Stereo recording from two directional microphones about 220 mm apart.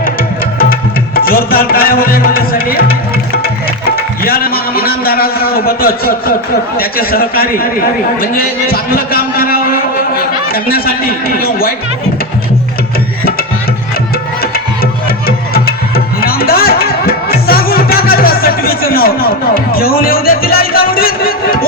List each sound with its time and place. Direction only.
0.6 s music: 40° left (ahead or behind)
6.7 s a man's voice: 45° left (ahead or behind)
14.4 s music: 45° left (ahead or behind)
16.2 s music: 45° left (ahead or behind)